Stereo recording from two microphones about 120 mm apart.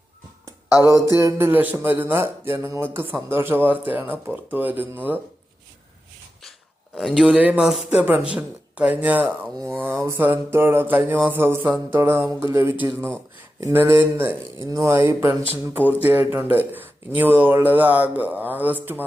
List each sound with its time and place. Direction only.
0.9 s mantra: 25° right (ahead or behind)
1.2 s speech: 20° right (ahead or behind)
6.9 s speech: 5° right (ahead or behind)
9.6 s mantra: 20° right (ahead or behind)
15.9 s speech: 15° right (ahead or behind)